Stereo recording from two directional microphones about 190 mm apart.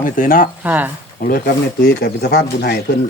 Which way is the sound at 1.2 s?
50° left (ahead or behind).